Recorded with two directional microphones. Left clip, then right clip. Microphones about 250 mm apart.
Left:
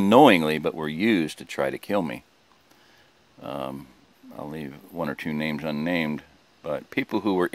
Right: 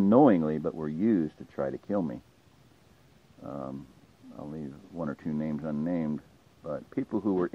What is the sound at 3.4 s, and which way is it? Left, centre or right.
Speech, left.